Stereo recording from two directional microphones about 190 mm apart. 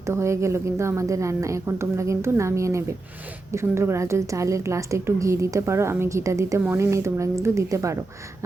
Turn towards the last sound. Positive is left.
turn(degrees=-15)  # may be behind; listen again after turning